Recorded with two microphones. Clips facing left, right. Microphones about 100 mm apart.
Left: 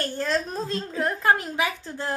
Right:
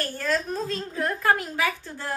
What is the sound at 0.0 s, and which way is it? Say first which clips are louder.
A woman's voice: left 1 dB; 25° left (ahead or behind).